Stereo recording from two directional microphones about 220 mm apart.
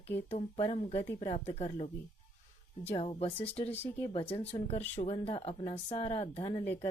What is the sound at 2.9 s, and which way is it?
Speech, 25° left (ahead or behind).